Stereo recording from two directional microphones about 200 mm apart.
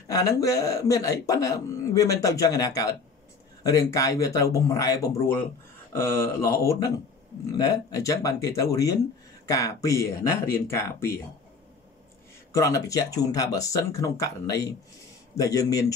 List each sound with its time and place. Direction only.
0.1 s speech: 15° left (ahead or behind)
12.5 s speech: 15° left (ahead or behind)